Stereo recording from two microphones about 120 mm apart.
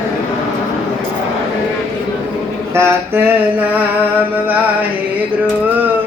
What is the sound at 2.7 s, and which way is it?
Music, 20° right (ahead or behind).